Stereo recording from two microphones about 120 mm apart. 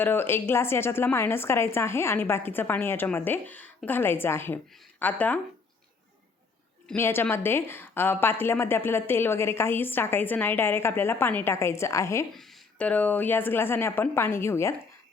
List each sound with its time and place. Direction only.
0.0 s a woman's voice: 20° left (ahead or behind)
6.9 s a woman's voice: 20° left (ahead or behind)
12.3 s speech: 5° left (ahead or behind)